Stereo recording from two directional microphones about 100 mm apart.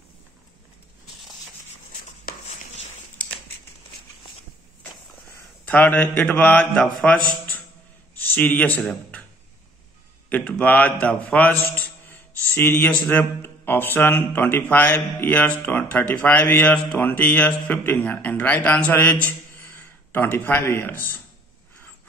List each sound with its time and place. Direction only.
5.7 s a man's voice: 15° left (ahead or behind)
10.3 s a man's voice: 15° left (ahead or behind)